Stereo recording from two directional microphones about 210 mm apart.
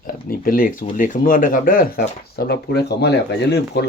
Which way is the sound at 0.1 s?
45° left (ahead or behind).